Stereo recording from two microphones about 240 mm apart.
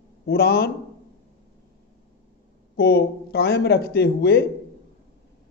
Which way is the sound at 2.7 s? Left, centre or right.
Left.